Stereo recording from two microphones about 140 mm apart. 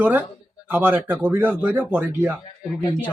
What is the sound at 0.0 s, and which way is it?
Speech, 10° right (ahead or behind).